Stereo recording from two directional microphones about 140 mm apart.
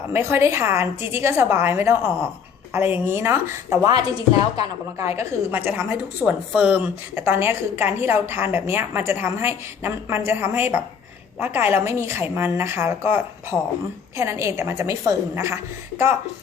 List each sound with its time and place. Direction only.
0.1 s a woman's voice: 20° right (ahead or behind)